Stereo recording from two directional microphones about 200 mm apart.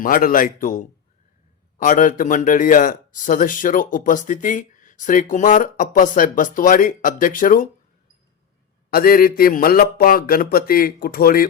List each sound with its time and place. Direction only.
0.0 s a man's voice: 45° left (ahead or behind)
8.9 s a man's voice: 50° left (ahead or behind)